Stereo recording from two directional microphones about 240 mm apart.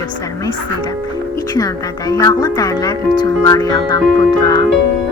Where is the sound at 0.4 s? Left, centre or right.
Centre.